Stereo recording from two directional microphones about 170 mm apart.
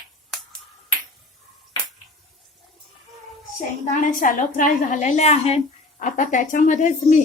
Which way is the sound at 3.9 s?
50° left (ahead or behind).